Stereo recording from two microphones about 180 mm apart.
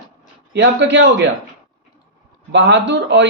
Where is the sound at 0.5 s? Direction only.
85° right.